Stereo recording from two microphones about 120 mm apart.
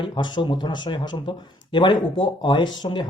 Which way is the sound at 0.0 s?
40° left (ahead or behind).